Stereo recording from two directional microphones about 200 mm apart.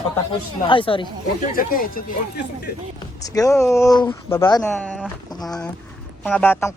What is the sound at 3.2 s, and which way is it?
Speech, 15° left (ahead or behind).